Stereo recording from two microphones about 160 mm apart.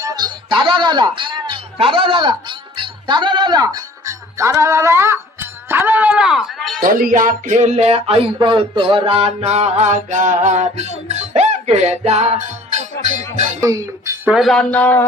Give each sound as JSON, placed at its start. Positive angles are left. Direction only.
{"t": 0.0, "sound": "music", "side_deg": -30}
{"t": 6.7, "sound": "music", "side_deg": -65}
{"t": 13.6, "sound": "speech", "side_deg": -20}
{"t": 14.3, "sound": "speech", "side_deg": 0}